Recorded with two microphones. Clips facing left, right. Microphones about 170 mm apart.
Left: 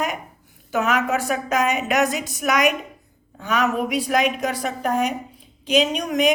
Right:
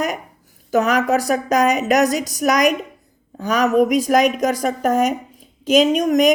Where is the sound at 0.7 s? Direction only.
40° right (ahead or behind).